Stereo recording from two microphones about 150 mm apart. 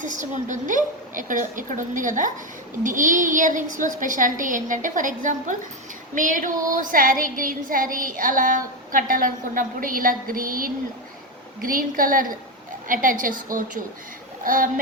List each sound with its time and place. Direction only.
0.0 s a woman's voice: 60° right (ahead or behind)
6.1 s child singing: 60° right (ahead or behind)
12.9 s a woman's voice: 65° right (ahead or behind)
14.4 s child singing: 65° right (ahead or behind)